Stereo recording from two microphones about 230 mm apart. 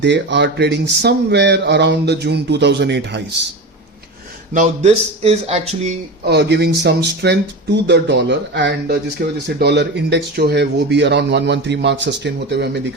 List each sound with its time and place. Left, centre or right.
0.0 s speech: right
4.5 s speech: right
6.2 s speech: right